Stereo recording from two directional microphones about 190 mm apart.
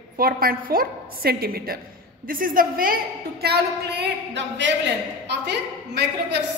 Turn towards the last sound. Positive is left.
turn(degrees=-60)  # may be behind; listen again after turning